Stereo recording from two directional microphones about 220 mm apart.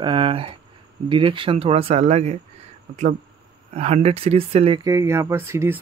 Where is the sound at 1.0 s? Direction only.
25° right (ahead or behind).